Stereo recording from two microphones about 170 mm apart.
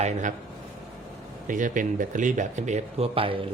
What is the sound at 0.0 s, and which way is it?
Speech, 45° right (ahead or behind).